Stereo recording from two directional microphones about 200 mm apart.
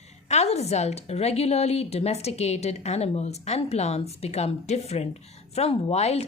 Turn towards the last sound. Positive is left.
turn(degrees=30)  # may be behind; listen again after turning